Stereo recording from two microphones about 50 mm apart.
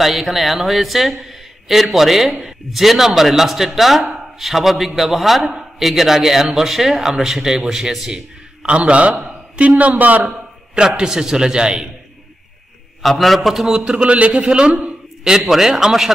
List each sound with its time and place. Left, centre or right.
0.0 s a man's voice: centre
8.6 s a man's voice: right
10.3 s a man's voice: centre
13.0 s a man's voice: centre; by 15.0 s right
15.2 s a man's voice: centre